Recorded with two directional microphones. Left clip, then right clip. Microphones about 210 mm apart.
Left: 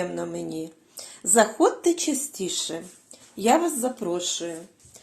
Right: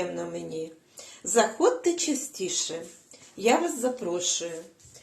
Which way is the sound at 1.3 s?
55° left (ahead or behind).